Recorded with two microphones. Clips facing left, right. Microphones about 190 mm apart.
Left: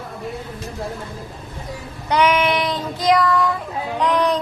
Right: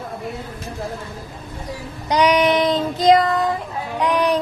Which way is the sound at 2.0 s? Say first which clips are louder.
Right 2 dB; 15° right (ahead or behind).